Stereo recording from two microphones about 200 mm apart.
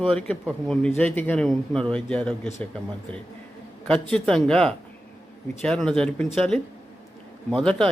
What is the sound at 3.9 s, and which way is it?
Speech, 5° left (ahead or behind).